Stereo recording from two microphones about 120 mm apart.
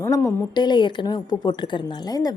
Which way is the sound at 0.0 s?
25° left (ahead or behind).